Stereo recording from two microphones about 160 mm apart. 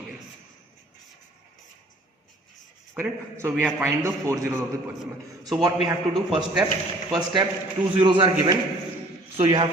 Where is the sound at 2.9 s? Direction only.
15° right (ahead or behind).